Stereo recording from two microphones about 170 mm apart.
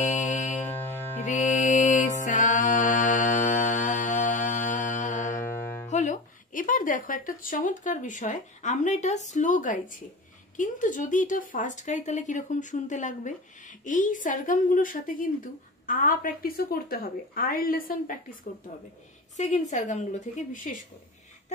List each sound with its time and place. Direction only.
0.0 s music: 45° left (ahead or behind)
5.4 s music: 15° left (ahead or behind)
5.9 s a woman's voice: 45° left (ahead or behind)
19.3 s speech: 45° left (ahead or behind)